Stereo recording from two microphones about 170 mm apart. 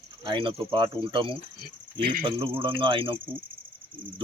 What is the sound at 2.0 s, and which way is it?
Speech, 55° right (ahead or behind).